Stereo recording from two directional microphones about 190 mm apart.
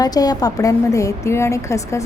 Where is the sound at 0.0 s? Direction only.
20° left (ahead or behind).